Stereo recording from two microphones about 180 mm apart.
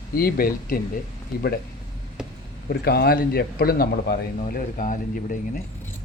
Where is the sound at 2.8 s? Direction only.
60° left (ahead or behind).